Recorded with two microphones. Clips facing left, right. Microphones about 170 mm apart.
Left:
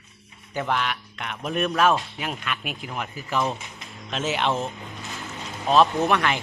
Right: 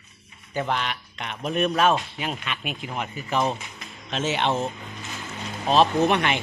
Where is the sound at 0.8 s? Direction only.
5° left (ahead or behind).